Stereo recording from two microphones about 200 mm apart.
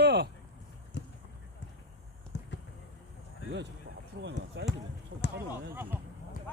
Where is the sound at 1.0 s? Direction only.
60° left (ahead or behind).